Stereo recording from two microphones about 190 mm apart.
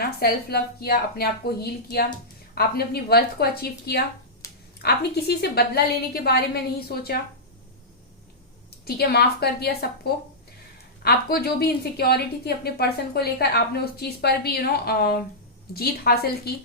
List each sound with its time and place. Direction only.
0.0 s a woman's voice: 55° left (ahead or behind)
4.4 s a sound: 15° left (ahead or behind)
4.8 s a woman's voice: 55° left (ahead or behind)
8.8 s a woman's voice: 55° left (ahead or behind)